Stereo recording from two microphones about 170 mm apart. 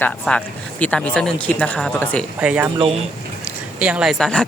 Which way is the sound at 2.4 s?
5° right (ahead or behind).